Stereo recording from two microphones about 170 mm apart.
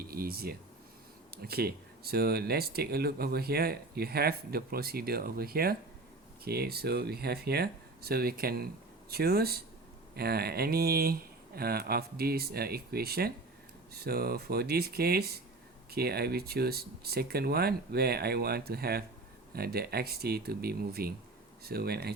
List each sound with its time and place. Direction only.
0.0 s speech: 60° right (ahead or behind)